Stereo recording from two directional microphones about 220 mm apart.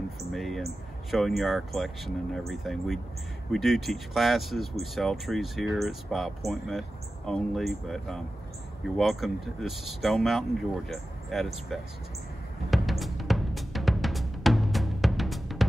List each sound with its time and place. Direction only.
0.3 s speech: centre (ahead or behind)
12.7 s music: centre (ahead or behind)